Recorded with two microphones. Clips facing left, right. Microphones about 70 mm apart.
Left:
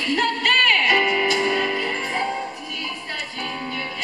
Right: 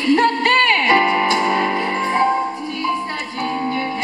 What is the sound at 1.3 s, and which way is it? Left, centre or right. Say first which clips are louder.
Music: right 4 dB; right.